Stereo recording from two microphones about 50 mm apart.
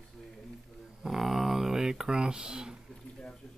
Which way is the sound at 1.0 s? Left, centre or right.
Centre.